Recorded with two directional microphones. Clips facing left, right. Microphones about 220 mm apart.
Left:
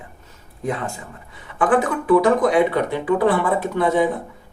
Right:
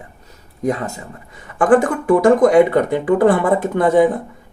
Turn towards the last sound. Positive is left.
turn(degrees=-45)  # may be behind; listen again after turning